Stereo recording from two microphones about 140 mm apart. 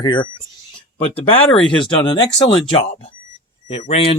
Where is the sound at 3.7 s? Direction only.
45° left (ahead or behind).